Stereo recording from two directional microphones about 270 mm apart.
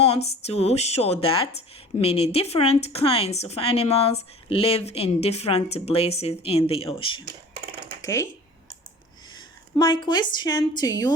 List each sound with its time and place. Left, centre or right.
0.4 s speech: left
9.3 s a woman's voice: centre